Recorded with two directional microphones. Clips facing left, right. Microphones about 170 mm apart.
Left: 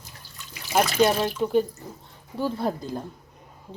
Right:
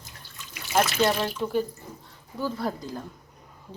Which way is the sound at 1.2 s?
20° left (ahead or behind).